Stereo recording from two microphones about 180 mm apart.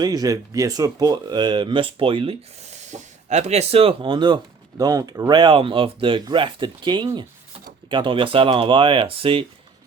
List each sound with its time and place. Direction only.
0.0 s speech: 20° right (ahead or behind)